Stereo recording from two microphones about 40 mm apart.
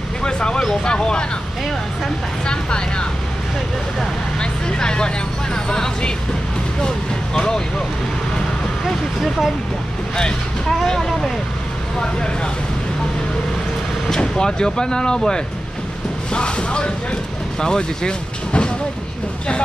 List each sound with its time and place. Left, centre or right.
0.2 s vehicle: left
0.8 s speech: left
2.4 s speech: left
4.4 s speech: left
7.3 s speech: centre
8.8 s speech: centre
10.1 s speech: centre
14.2 s speech: centre